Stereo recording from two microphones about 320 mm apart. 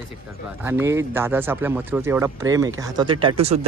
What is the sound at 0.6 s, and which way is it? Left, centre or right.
Speech, centre.